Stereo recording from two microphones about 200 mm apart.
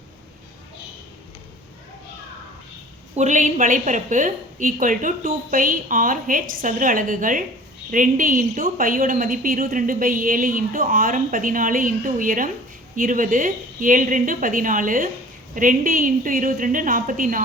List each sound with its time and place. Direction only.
3.2 s a woman's voice: 40° right (ahead or behind)